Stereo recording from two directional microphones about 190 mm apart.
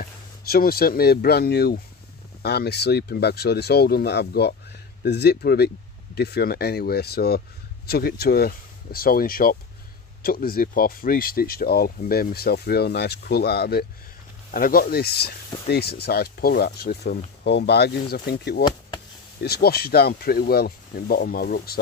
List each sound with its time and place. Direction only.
0.0 s speech: 50° left (ahead or behind)
18.6 s speech: 20° left (ahead or behind)
19.4 s speech: 55° left (ahead or behind)